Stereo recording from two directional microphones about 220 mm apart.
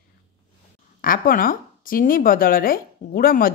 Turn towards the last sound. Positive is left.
turn(degrees=40)  # may be behind; listen again after turning